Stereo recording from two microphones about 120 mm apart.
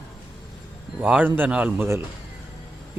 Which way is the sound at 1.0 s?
10° right (ahead or behind).